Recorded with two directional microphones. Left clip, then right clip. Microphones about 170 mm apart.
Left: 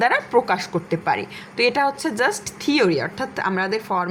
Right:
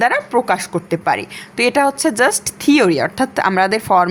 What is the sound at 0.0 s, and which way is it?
Speech, 20° right (ahead or behind).